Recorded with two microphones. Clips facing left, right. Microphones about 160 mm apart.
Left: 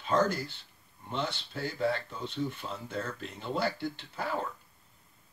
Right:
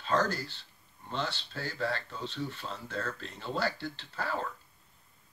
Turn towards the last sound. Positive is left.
turn(degrees=15)  # may be behind; listen again after turning